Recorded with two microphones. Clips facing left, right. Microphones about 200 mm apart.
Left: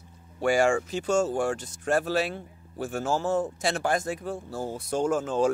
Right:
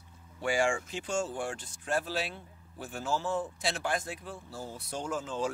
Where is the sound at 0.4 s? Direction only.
40° left (ahead or behind).